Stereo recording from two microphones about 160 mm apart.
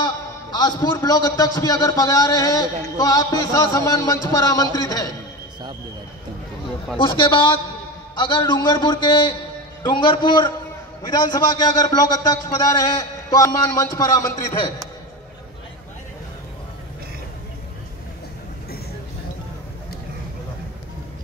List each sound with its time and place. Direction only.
0.0 s a man's voice: 25° left (ahead or behind)
7.0 s a man's voice: 30° left (ahead or behind)